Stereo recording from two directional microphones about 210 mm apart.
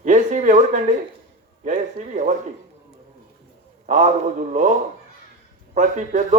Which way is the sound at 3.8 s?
35° right (ahead or behind).